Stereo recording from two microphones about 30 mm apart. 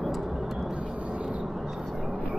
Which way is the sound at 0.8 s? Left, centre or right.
Right.